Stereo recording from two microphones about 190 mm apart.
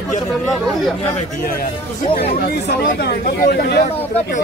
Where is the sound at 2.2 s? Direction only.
60° left (ahead or behind).